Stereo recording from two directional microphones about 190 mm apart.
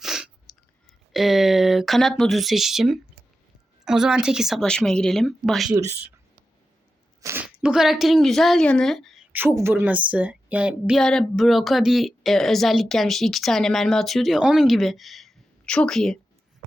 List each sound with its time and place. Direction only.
0.0 s a sound: centre (ahead or behind)
1.1 s a woman's voice: centre (ahead or behind)
5.7 s speech: 15° right (ahead or behind)
7.2 s a sound: 15° right (ahead or behind)
7.4 s speech: 5° right (ahead or behind)
9.3 s a woman's voice: 10° right (ahead or behind); by 16.1 s 5° left (ahead or behind)